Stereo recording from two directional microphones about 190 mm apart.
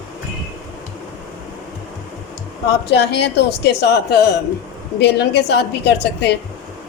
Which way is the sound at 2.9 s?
65° left (ahead or behind).